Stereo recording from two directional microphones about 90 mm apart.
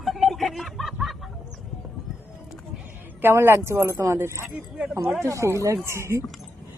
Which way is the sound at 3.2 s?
25° right (ahead or behind).